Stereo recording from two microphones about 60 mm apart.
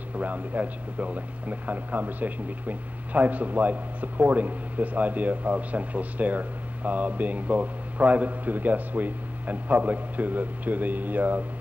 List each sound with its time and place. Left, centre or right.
0.2 s speech: right